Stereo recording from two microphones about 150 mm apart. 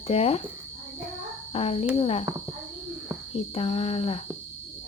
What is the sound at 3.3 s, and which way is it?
Speech, 45° left (ahead or behind).